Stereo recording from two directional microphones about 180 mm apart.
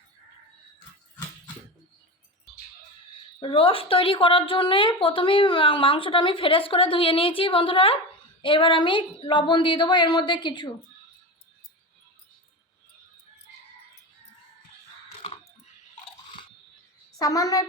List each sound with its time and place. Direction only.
3.4 s a woman's voice: 30° left (ahead or behind)
17.2 s a woman's voice: 20° left (ahead or behind)